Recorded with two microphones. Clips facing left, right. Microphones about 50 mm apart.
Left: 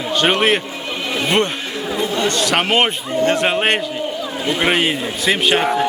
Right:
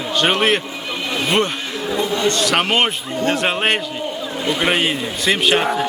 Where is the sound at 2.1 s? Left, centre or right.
Centre.